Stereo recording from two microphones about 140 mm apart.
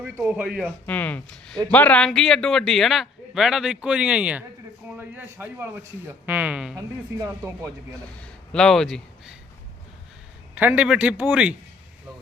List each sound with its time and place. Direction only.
0.0 s a man's voice: 10° right (ahead or behind)
0.9 s a man's voice: 10° left (ahead or behind); by 6.7 s 5° right (ahead or behind)
6.7 s speech: 25° right (ahead or behind)
8.2 s speech: 5° left (ahead or behind)
10.5 s a man's voice: 15° right (ahead or behind)